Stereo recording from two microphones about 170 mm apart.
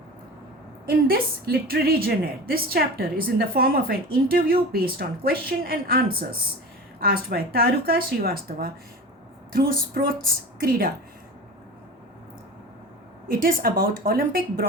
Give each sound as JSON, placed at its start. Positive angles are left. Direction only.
{"t": 0.9, "sound": "a woman's voice", "side_deg": -60}
{"t": 13.2, "sound": "a woman's voice", "side_deg": -60}